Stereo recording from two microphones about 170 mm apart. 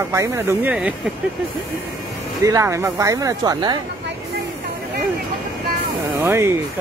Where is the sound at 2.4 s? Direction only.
20° right (ahead or behind).